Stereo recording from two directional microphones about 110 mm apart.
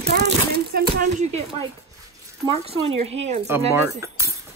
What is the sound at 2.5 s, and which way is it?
Speech, 65° right (ahead or behind).